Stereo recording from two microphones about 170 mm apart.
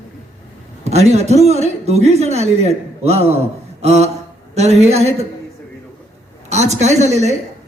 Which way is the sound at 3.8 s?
40° right (ahead or behind).